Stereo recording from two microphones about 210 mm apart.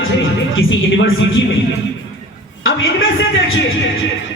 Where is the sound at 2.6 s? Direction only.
70° left (ahead or behind).